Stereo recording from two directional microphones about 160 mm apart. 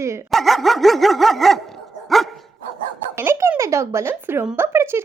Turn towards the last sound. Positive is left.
turn(degrees=-15)  # may be behind; listen again after turning